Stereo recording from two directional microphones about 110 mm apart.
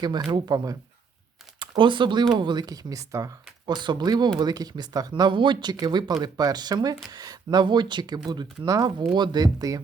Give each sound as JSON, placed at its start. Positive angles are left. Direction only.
{"t": 0.3, "sound": "speech", "side_deg": -40}
{"t": 3.8, "sound": "speech", "side_deg": -40}